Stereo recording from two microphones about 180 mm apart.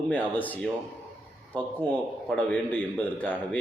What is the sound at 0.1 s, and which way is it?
A man's voice, 10° left (ahead or behind).